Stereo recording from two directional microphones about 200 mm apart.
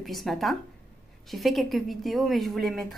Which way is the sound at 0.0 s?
Centre (ahead or behind).